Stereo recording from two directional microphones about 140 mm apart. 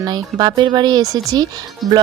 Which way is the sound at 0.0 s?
30° right (ahead or behind).